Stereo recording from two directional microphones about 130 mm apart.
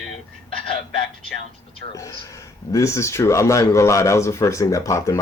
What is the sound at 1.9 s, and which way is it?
Speech, 25° left (ahead or behind).